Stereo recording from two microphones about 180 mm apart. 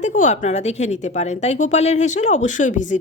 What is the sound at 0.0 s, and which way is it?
Speech, 40° left (ahead or behind).